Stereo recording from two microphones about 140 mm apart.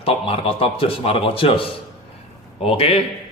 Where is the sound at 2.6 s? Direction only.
45° left (ahead or behind).